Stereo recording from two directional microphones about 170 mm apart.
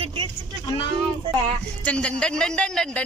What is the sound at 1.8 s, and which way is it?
Speech, 5° left (ahead or behind).